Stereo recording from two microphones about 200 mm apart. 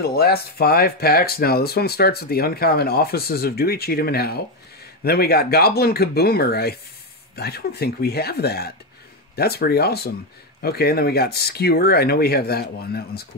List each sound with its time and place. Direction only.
0.0 s speech: 50° left (ahead or behind)